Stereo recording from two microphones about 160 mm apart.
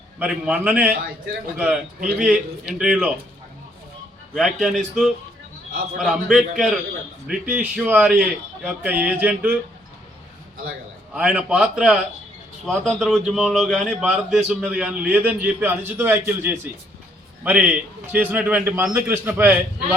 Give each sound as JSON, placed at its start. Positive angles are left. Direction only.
{"t": 0.2, "sound": "a man's voice", "side_deg": -5}
{"t": 4.4, "sound": "a man's voice", "side_deg": 0}
{"t": 11.1, "sound": "a man's voice", "side_deg": -5}